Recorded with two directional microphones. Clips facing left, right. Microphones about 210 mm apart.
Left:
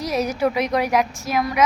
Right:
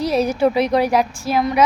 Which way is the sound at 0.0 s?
30° right (ahead or behind).